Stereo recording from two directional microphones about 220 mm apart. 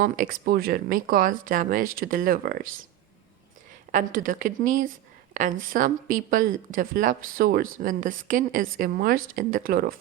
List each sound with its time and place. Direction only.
0.0 s a woman's voice: 40° right (ahead or behind)
3.9 s a woman's voice: 40° right (ahead or behind)